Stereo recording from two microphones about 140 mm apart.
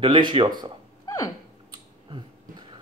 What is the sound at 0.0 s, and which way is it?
Speech, 35° right (ahead or behind).